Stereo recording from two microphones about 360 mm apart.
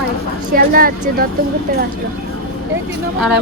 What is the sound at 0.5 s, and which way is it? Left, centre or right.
Speech, right.